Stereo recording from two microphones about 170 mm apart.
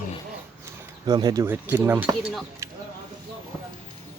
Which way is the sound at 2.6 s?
15° right (ahead or behind).